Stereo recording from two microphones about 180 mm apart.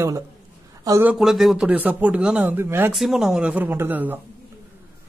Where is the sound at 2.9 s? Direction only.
Centre (ahead or behind).